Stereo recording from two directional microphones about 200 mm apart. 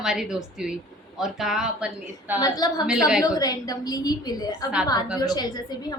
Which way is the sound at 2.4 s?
20° left (ahead or behind).